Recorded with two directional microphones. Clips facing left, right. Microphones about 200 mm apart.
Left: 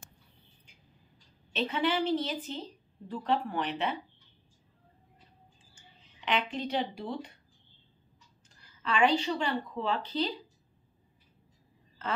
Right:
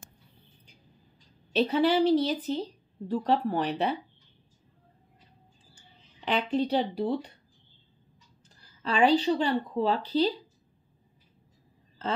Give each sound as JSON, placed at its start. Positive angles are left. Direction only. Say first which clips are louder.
{"t": 1.5, "sound": "a woman's voice", "louder": "right 6 dB", "side_deg": -35}
{"t": 6.2, "sound": "a woman's voice", "louder": "right 5 dB", "side_deg": -35}
{"t": 8.8, "sound": "a woman's voice", "louder": "right 4 dB", "side_deg": -35}